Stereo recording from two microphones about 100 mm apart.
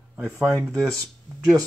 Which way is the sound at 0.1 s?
20° right (ahead or behind).